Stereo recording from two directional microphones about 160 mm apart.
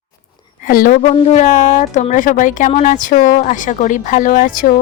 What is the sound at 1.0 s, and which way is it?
A woman's voice, 45° left (ahead or behind).